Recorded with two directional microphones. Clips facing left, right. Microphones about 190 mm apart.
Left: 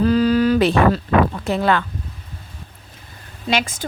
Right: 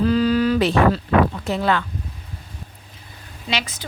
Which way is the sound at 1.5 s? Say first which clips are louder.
Left 2 dB; 55° left (ahead or behind).